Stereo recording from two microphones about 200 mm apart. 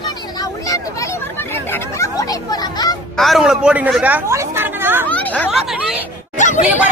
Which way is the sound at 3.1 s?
Centre (ahead or behind).